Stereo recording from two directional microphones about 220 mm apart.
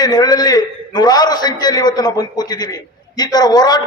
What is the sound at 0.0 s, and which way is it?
A man's voice, 15° left (ahead or behind).